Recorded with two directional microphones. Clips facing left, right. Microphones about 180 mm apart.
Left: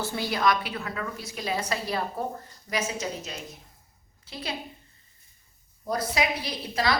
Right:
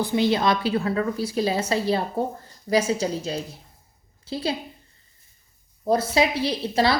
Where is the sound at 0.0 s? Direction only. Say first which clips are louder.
Right 5 dB; 20° right (ahead or behind).